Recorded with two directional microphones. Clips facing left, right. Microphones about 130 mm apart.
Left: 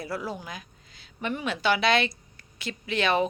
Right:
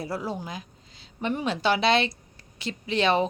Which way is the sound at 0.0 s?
30° right (ahead or behind).